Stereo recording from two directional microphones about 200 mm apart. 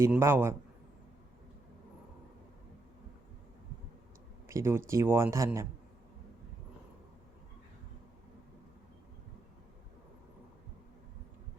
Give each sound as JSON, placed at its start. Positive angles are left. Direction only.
{"t": 0.0, "sound": "speech", "side_deg": -10}
{"t": 4.4, "sound": "speech", "side_deg": -15}